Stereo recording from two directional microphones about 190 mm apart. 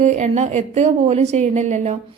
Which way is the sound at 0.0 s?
40° right (ahead or behind).